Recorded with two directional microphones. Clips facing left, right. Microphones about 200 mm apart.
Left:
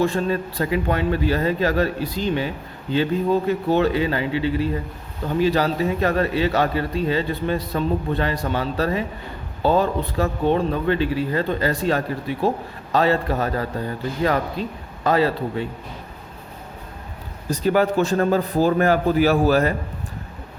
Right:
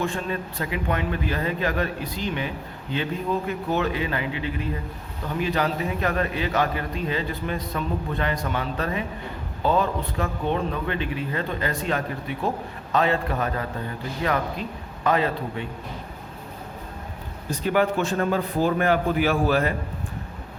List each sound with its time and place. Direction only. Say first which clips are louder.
0.0 s a man's voice: left 6 dB; 35° left (ahead or behind)
17.5 s a man's voice: left 4 dB; 40° left (ahead or behind)